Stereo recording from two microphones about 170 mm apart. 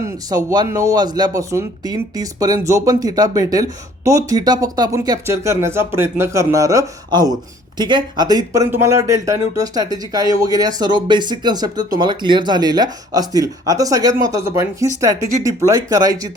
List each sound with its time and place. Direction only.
0.0 s speech: 20° right (ahead or behind)